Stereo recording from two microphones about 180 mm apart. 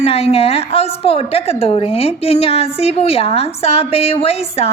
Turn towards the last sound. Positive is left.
turn(degrees=35)  # may be behind; listen again after turning